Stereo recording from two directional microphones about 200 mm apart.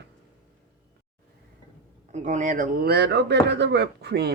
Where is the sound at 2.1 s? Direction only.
40° right (ahead or behind).